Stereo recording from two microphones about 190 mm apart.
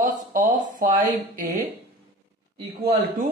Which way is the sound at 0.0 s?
45° right (ahead or behind).